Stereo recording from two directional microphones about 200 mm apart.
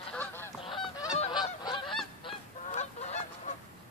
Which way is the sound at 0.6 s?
25° left (ahead or behind).